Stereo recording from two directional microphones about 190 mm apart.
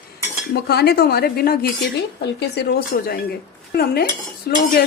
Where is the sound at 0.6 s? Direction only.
60° left (ahead or behind).